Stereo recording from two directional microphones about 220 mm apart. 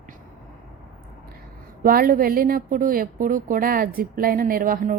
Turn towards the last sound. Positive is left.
turn(degrees=-40)  # may be behind; listen again after turning